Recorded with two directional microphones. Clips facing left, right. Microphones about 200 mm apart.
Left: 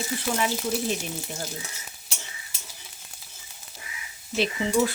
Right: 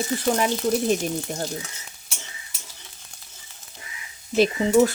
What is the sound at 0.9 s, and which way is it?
Dishes, 45° right (ahead or behind).